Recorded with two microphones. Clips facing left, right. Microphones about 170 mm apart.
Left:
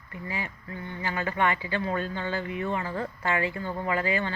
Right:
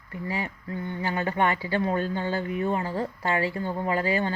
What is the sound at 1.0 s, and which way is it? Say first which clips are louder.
Speech: right 2 dB; 35° right (ahead or behind).